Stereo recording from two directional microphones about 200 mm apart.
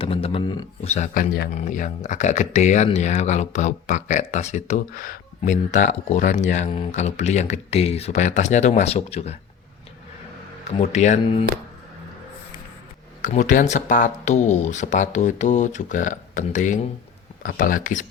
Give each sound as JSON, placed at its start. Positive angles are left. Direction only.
{"t": 0.0, "sound": "speech", "side_deg": 25}
{"t": 0.9, "sound": "speech", "side_deg": 40}
{"t": 10.8, "sound": "speech", "side_deg": 35}
{"t": 13.2, "sound": "speech", "side_deg": 40}